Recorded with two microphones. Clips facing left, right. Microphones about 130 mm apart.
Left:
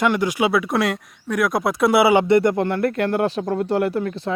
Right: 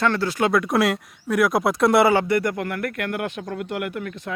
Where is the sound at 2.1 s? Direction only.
25° left (ahead or behind).